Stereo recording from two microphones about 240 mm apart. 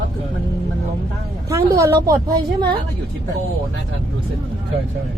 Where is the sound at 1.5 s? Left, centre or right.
Centre.